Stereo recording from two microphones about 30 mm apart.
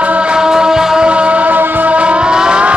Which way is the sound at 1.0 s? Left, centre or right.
Right.